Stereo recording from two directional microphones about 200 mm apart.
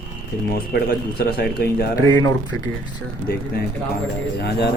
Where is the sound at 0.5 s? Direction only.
50° left (ahead or behind).